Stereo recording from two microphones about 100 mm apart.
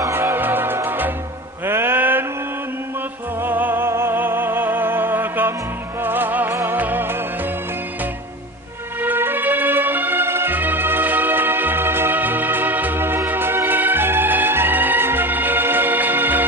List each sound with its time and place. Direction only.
0.0 s music: 25° right (ahead or behind)
3.4 s music: 20° right (ahead or behind)
9.0 s music: 20° right (ahead or behind)